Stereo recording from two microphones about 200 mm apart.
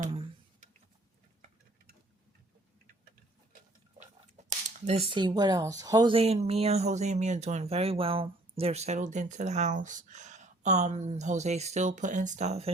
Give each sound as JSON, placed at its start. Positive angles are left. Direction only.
{"t": 4.4, "sound": "speech", "side_deg": -30}